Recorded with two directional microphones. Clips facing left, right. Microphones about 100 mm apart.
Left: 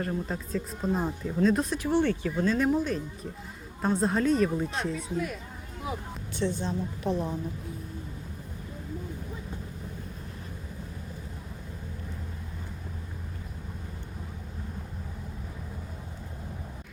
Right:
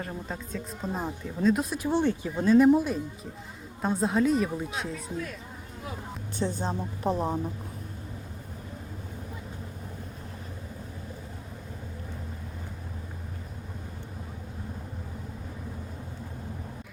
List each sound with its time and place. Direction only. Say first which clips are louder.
0.0 s speech: left 4 dB; centre (ahead or behind)
1.8 s speech: even; 15° right (ahead or behind); by 5.1 s centre (ahead or behind)
6.4 s speech: left 1 dB; 40° right (ahead or behind)